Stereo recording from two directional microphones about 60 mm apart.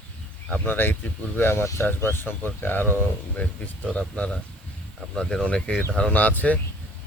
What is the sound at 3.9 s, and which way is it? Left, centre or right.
Speech, centre.